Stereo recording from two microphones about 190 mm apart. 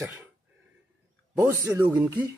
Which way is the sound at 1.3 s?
15° right (ahead or behind).